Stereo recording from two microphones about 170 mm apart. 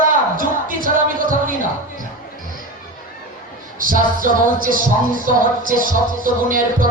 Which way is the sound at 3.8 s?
55° right (ahead or behind).